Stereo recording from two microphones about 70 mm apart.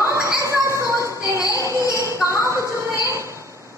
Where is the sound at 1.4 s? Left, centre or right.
Left.